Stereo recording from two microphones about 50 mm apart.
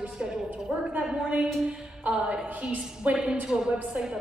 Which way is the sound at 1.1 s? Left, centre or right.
Right.